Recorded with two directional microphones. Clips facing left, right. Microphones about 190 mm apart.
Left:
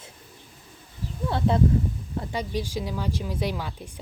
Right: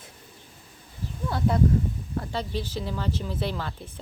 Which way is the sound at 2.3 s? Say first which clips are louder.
Left 3 dB; 15° left (ahead or behind).